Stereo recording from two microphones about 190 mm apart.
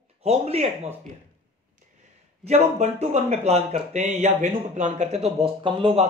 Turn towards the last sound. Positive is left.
turn(degrees=-25)  # may be behind; listen again after turning